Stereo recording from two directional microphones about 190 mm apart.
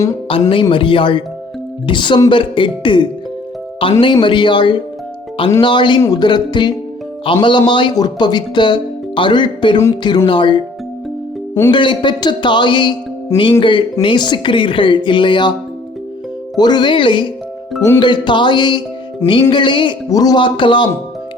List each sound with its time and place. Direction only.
0.3 s speech: 25° left (ahead or behind)
11.7 s speech: 25° left (ahead or behind)
16.6 s speech: 20° left (ahead or behind)